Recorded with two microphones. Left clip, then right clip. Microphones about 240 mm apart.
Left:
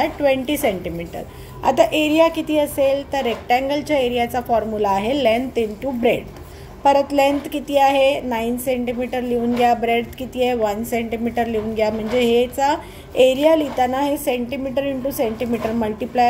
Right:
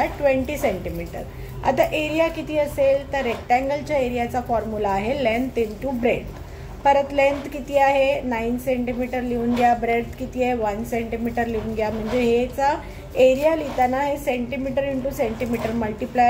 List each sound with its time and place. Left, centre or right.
0.0 s a woman's voice: left